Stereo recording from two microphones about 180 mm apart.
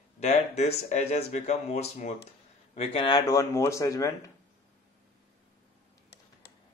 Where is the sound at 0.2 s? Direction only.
40° left (ahead or behind); by 4.1 s 20° left (ahead or behind).